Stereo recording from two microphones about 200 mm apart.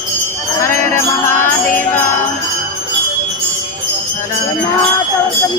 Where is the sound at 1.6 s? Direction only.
10° left (ahead or behind).